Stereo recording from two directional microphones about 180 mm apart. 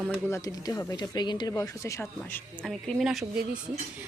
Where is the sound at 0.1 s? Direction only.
15° left (ahead or behind).